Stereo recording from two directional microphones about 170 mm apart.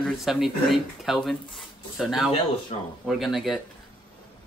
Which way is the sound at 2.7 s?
35° left (ahead or behind).